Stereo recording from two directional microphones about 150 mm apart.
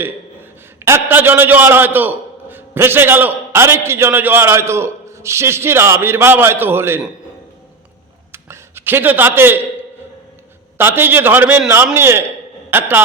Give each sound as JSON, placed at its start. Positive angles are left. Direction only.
{"t": 0.9, "sound": "a man's voice", "side_deg": -15}
{"t": 8.3, "sound": "a sound", "side_deg": -15}
{"t": 10.8, "sound": "a man's voice", "side_deg": -15}